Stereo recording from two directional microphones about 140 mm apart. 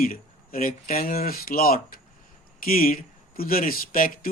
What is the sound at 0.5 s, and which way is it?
Speech, 90° left.